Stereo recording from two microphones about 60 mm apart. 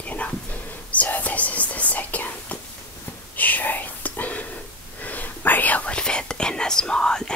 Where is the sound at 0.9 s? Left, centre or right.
Left.